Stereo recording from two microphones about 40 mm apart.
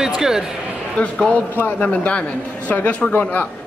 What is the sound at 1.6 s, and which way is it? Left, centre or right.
Speech, left.